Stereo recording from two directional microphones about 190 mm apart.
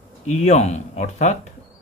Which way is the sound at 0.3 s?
35° left (ahead or behind).